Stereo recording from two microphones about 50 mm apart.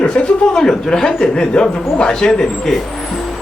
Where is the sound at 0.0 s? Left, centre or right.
Left.